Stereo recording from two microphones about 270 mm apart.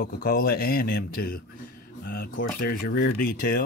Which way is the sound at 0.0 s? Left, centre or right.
Left.